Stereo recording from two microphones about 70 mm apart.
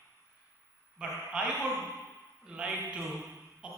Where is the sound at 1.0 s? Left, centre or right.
Centre.